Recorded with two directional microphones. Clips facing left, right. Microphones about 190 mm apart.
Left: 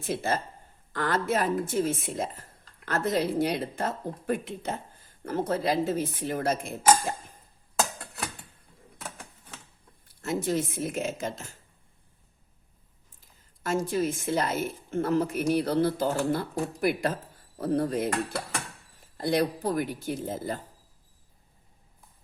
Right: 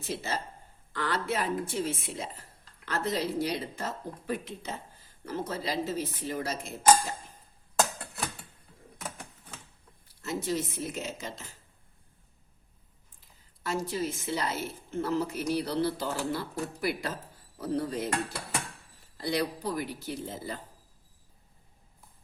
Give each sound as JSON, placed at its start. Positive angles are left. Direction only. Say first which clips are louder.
{"t": 0.1, "sound": "a woman's voice", "louder": "left 5 dB", "side_deg": 50}
{"t": 10.2, "sound": "a woman's voice", "louder": "left 4 dB", "side_deg": 50}
{"t": 13.6, "sound": "a woman's voice", "louder": "left 5 dB", "side_deg": 50}
{"t": 17.6, "sound": "dishes", "louder": "left 5 dB", "side_deg": 55}
{"t": 19.1, "sound": "a woman's voice", "louder": "left 5 dB", "side_deg": 50}